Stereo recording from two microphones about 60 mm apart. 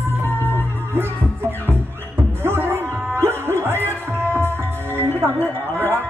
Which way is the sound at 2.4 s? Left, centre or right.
Right.